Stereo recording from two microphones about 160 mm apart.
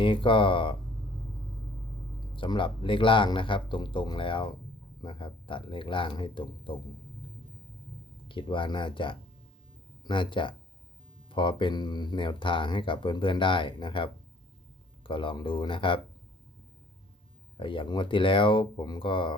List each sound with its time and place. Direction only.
0.0 s speech: 30° left (ahead or behind)
2.3 s speech: 30° left (ahead or behind)
8.3 s speech: 30° left (ahead or behind)
17.6 s speech: 30° left (ahead or behind)